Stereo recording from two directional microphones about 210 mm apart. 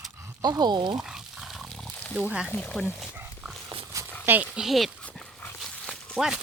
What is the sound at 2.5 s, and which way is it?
Speech, 5° left (ahead or behind).